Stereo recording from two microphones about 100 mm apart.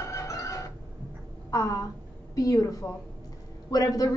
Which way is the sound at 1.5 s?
35° left (ahead or behind).